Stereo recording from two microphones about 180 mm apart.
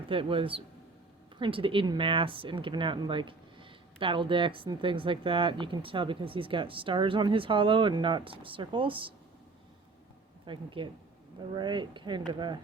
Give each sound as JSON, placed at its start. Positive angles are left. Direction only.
{"t": 0.1, "sound": "speech", "side_deg": -30}
{"t": 10.4, "sound": "speech", "side_deg": -25}